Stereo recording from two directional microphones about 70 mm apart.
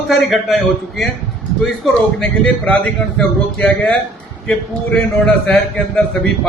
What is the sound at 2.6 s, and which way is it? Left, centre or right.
Speech, centre.